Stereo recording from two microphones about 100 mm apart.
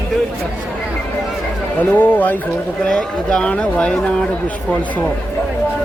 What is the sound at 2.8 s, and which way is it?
Speech, 10° left (ahead or behind).